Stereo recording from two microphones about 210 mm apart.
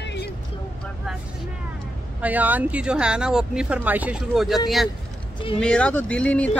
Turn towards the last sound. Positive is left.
turn(degrees=5)  # may be behind; listen again after turning